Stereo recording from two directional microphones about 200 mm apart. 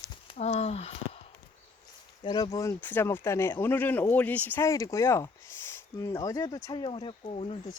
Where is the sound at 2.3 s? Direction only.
20° left (ahead or behind).